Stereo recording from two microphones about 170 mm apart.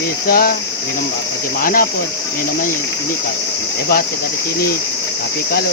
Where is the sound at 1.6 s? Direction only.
55° left (ahead or behind).